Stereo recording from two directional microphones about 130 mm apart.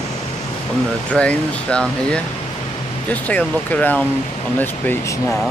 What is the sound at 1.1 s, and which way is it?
Speech, 10° left (ahead or behind).